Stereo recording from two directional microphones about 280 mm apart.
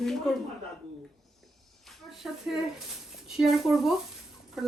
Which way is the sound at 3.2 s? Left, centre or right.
Centre.